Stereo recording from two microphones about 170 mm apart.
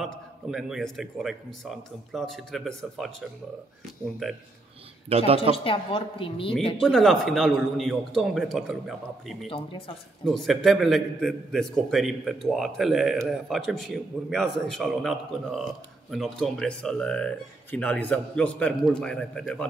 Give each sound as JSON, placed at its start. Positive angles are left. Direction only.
{"t": 0.0, "sound": "a man's voice", "side_deg": 0}
{"t": 3.8, "sound": "a man's voice", "side_deg": 0}
{"t": 5.1, "sound": "speech", "side_deg": -35}
{"t": 5.6, "sound": "a woman's voice", "side_deg": 30}
{"t": 6.8, "sound": "a man's voice", "side_deg": 0}
{"t": 9.5, "sound": "a woman's voice", "side_deg": 30}
{"t": 10.2, "sound": "a man's voice", "side_deg": 0}